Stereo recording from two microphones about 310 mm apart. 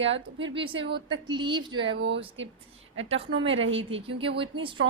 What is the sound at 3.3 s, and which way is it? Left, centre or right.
Speech, right.